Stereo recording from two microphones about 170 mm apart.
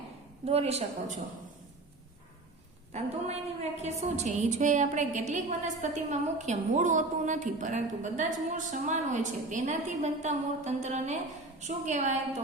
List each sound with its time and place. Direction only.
0.4 s speech: 35° right (ahead or behind)
2.9 s a woman's voice: 40° right (ahead or behind)